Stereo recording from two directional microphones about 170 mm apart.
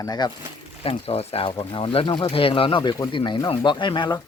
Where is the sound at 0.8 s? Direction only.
35° left (ahead or behind).